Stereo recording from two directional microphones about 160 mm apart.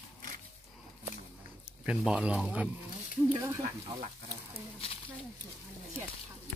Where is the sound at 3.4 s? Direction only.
20° right (ahead or behind).